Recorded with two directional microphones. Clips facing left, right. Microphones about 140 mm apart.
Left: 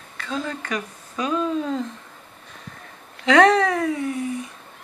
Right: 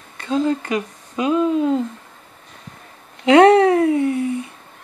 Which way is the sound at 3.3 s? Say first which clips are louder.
Right 6 dB; 30° right (ahead or behind).